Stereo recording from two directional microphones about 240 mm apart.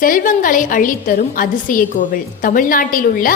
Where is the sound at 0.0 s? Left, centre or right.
Left.